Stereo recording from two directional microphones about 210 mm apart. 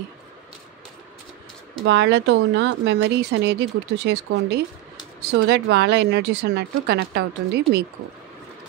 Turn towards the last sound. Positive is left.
turn(degrees=-50)  # may be behind; listen again after turning